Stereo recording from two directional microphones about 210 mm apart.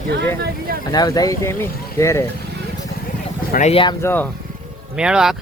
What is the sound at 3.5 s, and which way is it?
Speech, 30° left (ahead or behind).